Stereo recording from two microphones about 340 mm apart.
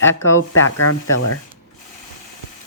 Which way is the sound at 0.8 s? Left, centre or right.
Left.